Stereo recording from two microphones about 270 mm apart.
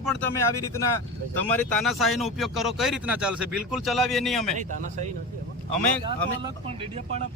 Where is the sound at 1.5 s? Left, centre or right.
Centre.